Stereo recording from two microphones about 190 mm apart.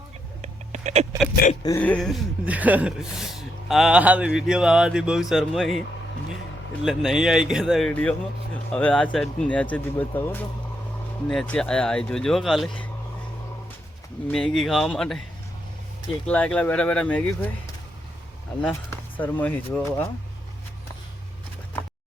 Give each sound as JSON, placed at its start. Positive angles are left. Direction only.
{"t": 0.4, "sound": "a sound", "side_deg": -35}
{"t": 1.6, "sound": "speech", "side_deg": 10}
{"t": 6.8, "sound": "speech", "side_deg": 0}
{"t": 14.3, "sound": "speech", "side_deg": 5}
{"t": 16.2, "sound": "speech", "side_deg": 5}
{"t": 18.6, "sound": "speech", "side_deg": 5}